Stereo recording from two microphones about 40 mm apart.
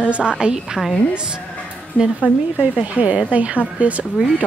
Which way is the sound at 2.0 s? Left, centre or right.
Left.